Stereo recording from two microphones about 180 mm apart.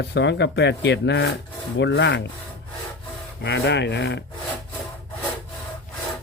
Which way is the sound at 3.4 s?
75° left (ahead or behind).